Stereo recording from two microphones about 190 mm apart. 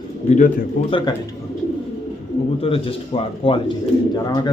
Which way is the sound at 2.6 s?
30° left (ahead or behind).